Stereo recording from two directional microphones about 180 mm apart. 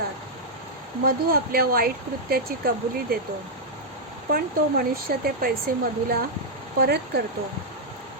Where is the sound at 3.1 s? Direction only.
55° right (ahead or behind).